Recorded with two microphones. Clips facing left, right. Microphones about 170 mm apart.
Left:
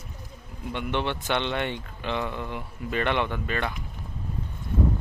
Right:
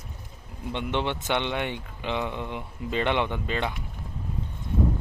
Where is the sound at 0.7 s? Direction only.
20° right (ahead or behind).